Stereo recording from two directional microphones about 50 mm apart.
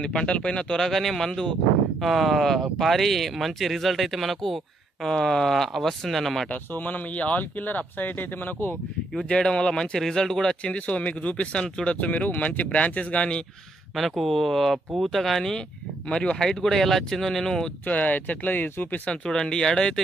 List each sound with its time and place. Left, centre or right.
0.0 s speech: centre
0.7 s speech: centre
2.0 s speech: centre
6.5 s speech: left
9.3 s speech: centre
10.6 s speech: left
13.9 s speech: centre
16.1 s speech: centre
17.8 s speech: left
19.0 s speech: centre